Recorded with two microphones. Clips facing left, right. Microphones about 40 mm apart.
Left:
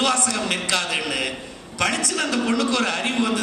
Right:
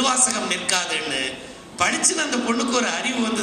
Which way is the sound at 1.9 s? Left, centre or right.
Right.